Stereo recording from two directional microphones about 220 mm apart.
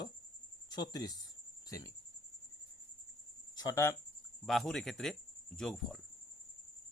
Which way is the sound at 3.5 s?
15° left (ahead or behind).